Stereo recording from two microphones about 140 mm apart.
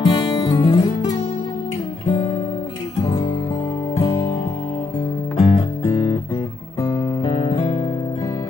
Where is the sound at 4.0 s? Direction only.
45° left (ahead or behind).